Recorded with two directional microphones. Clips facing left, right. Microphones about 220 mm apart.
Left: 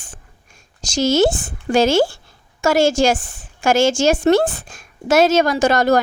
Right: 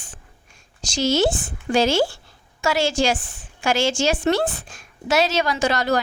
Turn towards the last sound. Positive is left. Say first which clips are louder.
# left 6 dB
turn(degrees=45)  # may be behind; listen again after turning